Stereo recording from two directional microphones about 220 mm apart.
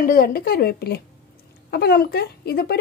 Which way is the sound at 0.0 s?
40° left (ahead or behind).